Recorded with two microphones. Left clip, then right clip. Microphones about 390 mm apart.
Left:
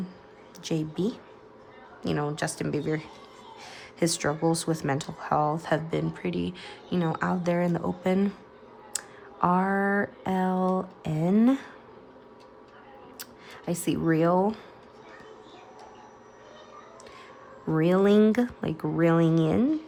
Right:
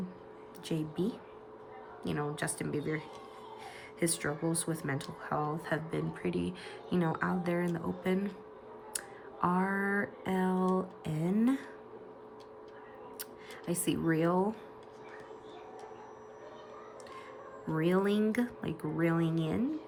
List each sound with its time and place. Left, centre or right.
0.6 s speech: centre
13.7 s speech: centre
17.7 s speech: centre